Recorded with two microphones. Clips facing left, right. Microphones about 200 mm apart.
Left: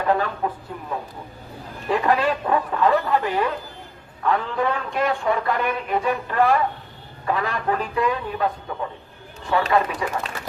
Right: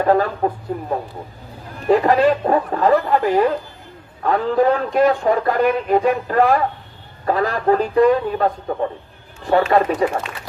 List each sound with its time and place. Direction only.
0.0 s speech: 40° right (ahead or behind)